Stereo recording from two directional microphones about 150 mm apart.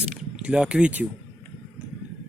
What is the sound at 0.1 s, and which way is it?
Speech, 5° right (ahead or behind).